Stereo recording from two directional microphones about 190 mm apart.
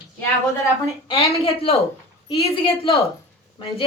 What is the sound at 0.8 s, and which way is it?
Speech, 25° left (ahead or behind).